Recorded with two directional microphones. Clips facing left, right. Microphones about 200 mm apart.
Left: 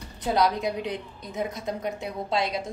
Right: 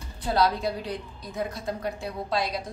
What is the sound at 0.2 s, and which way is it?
A woman's voice, 20° left (ahead or behind).